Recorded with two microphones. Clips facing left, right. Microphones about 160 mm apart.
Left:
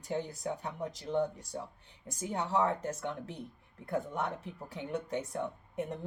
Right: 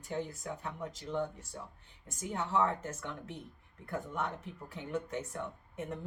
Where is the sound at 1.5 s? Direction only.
30° left (ahead or behind).